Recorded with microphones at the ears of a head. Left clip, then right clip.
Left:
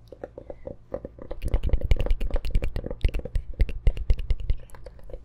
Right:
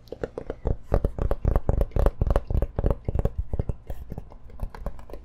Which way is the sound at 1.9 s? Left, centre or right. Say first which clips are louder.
Right 9 dB; right.